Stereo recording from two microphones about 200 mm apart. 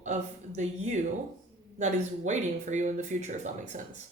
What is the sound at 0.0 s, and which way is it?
A woman's voice, 35° right (ahead or behind).